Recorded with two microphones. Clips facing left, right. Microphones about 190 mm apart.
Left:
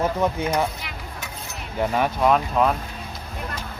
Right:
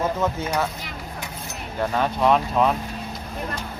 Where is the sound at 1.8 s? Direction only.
15° left (ahead or behind).